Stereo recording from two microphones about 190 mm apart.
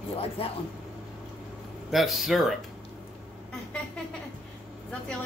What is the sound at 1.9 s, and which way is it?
Speech, centre (ahead or behind).